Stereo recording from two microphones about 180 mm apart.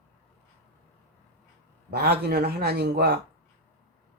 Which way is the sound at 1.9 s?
60° right (ahead or behind).